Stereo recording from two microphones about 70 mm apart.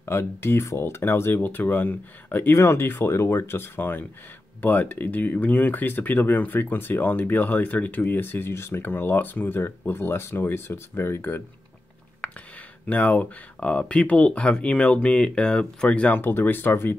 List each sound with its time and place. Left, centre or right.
0.0 s speech: left
12.2 s speech: centre
16.2 s speech: left